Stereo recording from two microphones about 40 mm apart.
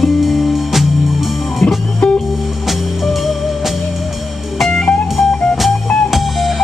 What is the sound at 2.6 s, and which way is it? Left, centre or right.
Music, centre.